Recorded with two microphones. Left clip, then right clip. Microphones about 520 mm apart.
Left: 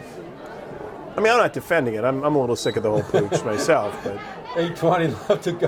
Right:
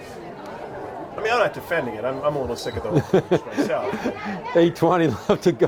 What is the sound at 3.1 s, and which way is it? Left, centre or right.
Speech, right.